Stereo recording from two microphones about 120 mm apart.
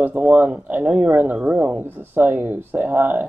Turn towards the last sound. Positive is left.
turn(degrees=-15)  # may be behind; listen again after turning